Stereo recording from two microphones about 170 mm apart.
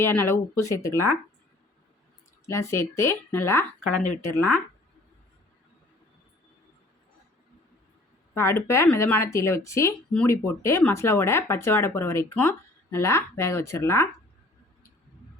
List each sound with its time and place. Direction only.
0.0 s speech: 15° left (ahead or behind)
2.5 s speech: 15° left (ahead or behind)
8.4 s speech: 15° left (ahead or behind)